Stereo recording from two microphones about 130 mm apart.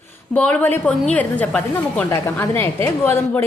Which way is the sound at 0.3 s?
10° left (ahead or behind).